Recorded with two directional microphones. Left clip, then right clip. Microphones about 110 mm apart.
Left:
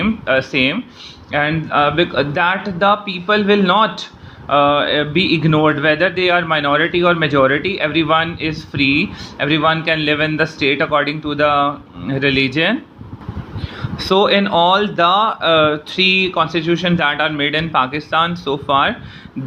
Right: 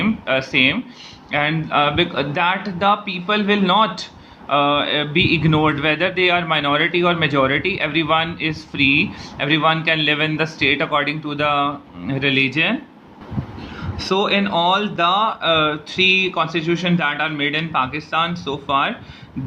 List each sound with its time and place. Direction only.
0.0 s speech: 15° left (ahead or behind)
13.7 s speech: 30° left (ahead or behind)